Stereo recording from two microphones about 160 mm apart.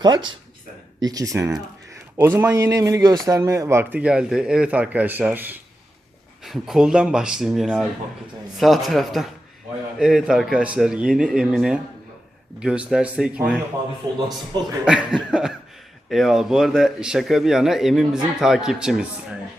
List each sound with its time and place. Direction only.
0.0 s a man's voice: 25° right (ahead or behind); by 13.5 s 5° right (ahead or behind)
14.3 s speech: 25° right (ahead or behind)
14.8 s speech: 5° right (ahead or behind)